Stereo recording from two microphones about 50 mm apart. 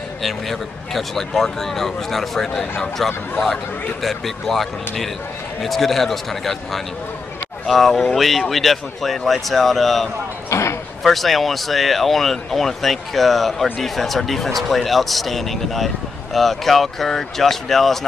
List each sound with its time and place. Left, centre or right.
0.2 s speech: centre
10.5 s a sound: left
11.1 s speech: centre